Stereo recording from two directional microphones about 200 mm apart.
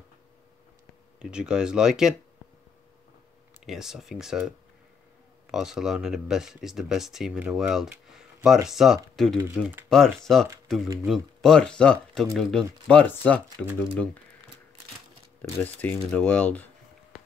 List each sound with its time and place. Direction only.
1.2 s speech: 5° right (ahead or behind)
3.6 s speech: centre (ahead or behind)
9.6 s speech: 10° right (ahead or behind)
9.8 s speech: centre (ahead or behind)
15.4 s speech: 10° left (ahead or behind)